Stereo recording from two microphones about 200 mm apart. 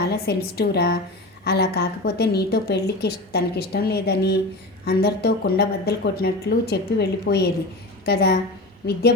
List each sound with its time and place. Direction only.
0.1 s a woman's voice: 55° left (ahead or behind)